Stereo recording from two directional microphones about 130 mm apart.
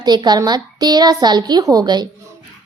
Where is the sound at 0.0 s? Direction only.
30° right (ahead or behind).